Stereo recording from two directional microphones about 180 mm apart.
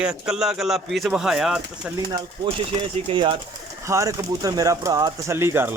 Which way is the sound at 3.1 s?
30° right (ahead or behind).